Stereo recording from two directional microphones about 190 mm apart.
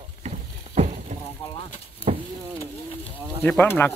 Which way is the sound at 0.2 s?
35° right (ahead or behind).